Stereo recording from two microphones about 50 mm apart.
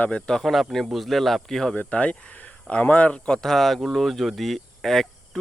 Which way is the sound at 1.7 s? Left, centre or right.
Left.